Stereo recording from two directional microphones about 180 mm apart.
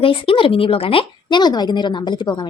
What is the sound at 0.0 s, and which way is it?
A woman's voice, 30° left (ahead or behind).